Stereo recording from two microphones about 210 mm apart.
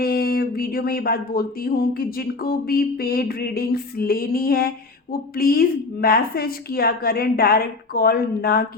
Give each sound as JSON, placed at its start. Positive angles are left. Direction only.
{"t": 0.0, "sound": "speech", "side_deg": 45}